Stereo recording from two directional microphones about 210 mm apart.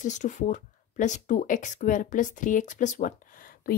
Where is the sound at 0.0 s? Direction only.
35° left (ahead or behind).